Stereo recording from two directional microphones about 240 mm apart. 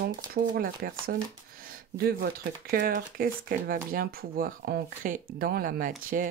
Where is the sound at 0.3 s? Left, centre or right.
Right.